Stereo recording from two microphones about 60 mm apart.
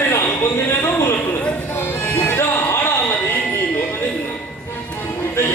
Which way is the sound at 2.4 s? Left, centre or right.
Left.